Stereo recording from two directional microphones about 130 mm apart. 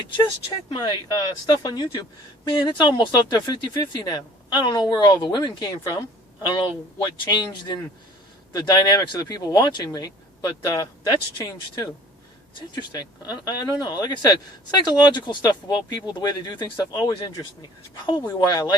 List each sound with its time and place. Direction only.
0.7 s speech: 35° left (ahead or behind)